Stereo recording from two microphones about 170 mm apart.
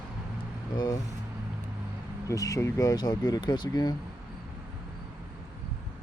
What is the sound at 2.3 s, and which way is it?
Speech, 20° left (ahead or behind).